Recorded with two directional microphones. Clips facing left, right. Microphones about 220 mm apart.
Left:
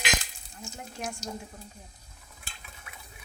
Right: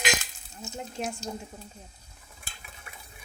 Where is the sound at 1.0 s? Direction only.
20° right (ahead or behind).